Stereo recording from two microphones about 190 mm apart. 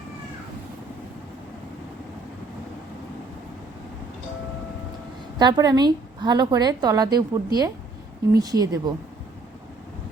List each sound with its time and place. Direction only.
5.4 s a woman's voice: 20° right (ahead or behind)